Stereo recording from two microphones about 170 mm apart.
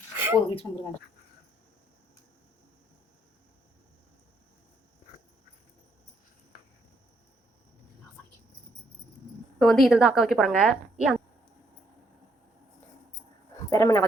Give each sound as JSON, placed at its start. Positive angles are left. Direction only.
{"t": 0.3, "sound": "speech", "side_deg": 35}
{"t": 9.6, "sound": "a woman's voice", "side_deg": 0}
{"t": 13.7, "sound": "speech", "side_deg": 15}